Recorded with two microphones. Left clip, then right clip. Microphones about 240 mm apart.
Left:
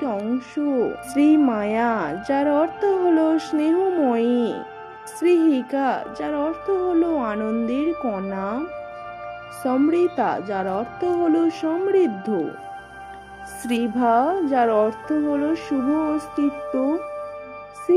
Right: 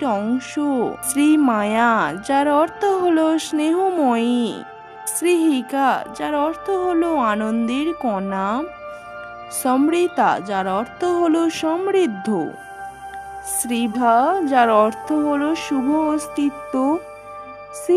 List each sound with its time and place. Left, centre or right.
0.0 s speech: right
13.7 s speech: right